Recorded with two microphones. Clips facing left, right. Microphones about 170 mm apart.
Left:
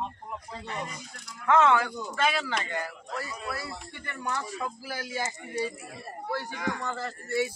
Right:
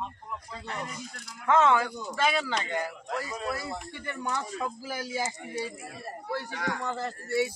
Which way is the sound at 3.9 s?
20° right (ahead or behind).